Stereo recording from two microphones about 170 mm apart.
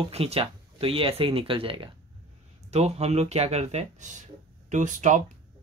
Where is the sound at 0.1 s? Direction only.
35° right (ahead or behind).